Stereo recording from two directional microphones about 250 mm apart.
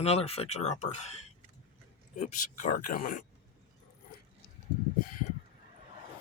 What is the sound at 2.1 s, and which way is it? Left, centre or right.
Speech, left.